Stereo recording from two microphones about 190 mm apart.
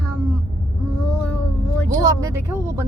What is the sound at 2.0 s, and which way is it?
Speech, 20° right (ahead or behind).